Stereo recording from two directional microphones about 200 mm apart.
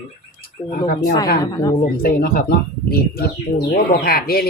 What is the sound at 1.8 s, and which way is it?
Speech, 45° left (ahead or behind).